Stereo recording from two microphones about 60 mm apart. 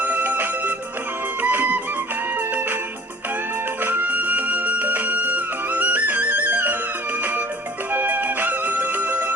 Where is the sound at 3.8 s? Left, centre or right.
Right.